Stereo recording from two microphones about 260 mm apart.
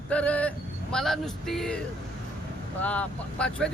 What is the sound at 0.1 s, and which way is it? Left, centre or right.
Speech, centre.